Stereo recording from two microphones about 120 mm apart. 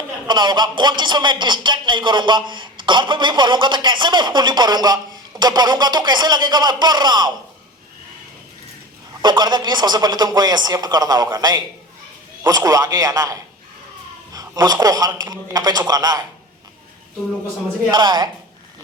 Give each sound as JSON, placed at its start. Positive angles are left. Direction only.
{"t": 0.3, "sound": "a man's voice", "side_deg": -40}
{"t": 9.2, "sound": "a man's voice", "side_deg": -40}
{"t": 17.9, "sound": "a man's voice", "side_deg": -35}